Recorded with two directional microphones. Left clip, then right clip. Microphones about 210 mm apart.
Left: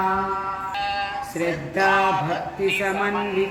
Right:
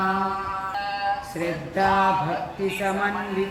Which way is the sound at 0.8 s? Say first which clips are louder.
Left 1 dB; 45° left (ahead or behind).